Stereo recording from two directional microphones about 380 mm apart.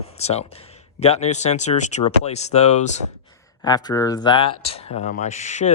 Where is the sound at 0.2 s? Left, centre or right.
Centre.